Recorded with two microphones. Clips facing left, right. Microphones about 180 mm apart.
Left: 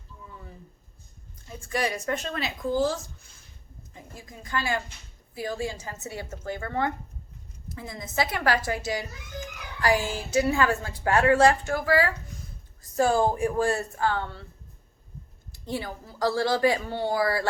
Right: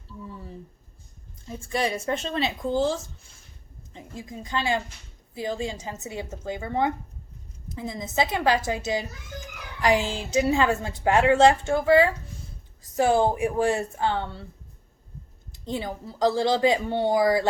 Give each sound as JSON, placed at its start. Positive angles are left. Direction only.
{"t": 1.5, "sound": "a woman's voice", "side_deg": -25}
{"t": 15.5, "sound": "a woman's voice", "side_deg": -20}